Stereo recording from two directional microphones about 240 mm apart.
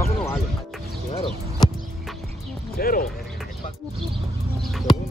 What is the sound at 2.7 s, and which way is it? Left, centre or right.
Speech, left.